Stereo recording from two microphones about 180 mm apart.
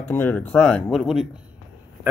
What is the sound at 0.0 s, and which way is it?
Speech, 10° left (ahead or behind).